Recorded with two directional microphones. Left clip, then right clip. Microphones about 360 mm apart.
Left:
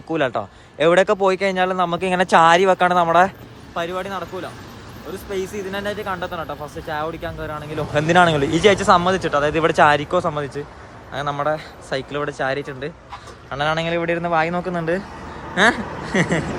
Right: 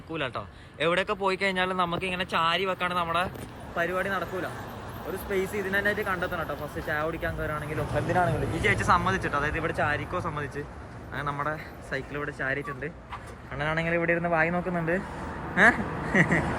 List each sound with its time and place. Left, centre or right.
0.1 s speech: centre
5.3 s speech: centre
7.9 s a man's voice: left
8.6 s a man's voice: centre